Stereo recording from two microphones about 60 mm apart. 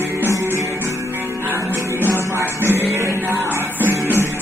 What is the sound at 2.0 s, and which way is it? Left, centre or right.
Music, right.